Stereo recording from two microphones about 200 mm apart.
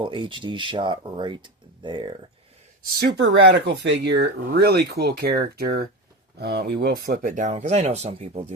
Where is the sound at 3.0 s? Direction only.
60° right (ahead or behind).